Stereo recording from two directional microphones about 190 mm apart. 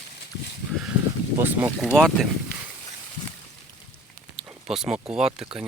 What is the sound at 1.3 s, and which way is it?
Speech, 10° right (ahead or behind).